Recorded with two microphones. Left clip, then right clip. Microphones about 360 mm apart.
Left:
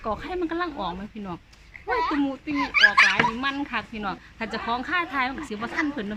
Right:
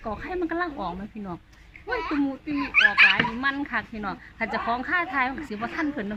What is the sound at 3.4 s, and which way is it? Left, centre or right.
A woman's voice, centre.